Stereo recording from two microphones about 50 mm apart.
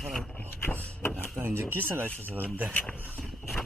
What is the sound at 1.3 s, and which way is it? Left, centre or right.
Speech, right.